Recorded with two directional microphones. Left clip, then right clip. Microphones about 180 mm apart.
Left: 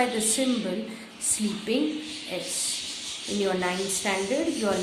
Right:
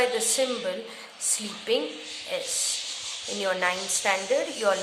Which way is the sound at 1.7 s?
35° right (ahead or behind).